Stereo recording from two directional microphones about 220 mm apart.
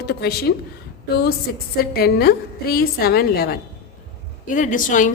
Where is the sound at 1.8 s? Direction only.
45° left (ahead or behind).